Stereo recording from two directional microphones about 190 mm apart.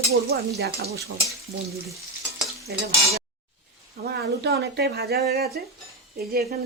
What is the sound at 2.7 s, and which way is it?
Speech, 60° right (ahead or behind).